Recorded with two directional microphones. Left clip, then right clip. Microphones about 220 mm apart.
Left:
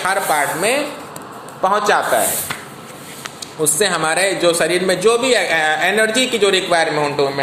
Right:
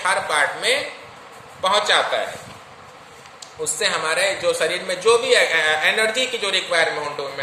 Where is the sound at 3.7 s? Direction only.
5° right (ahead or behind).